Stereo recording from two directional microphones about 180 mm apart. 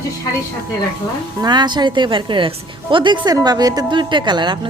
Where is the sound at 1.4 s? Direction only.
25° right (ahead or behind).